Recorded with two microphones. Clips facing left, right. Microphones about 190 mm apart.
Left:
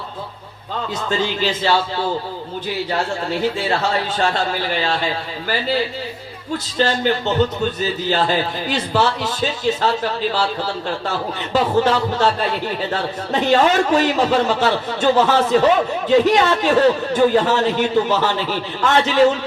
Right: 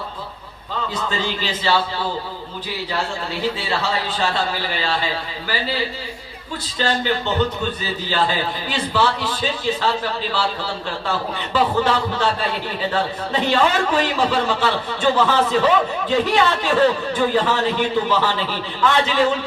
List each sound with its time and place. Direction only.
1.2 s a man's voice: 45° left (ahead or behind)
3.6 s a man's voice: 45° left (ahead or behind)
6.7 s a man's voice: 45° left (ahead or behind)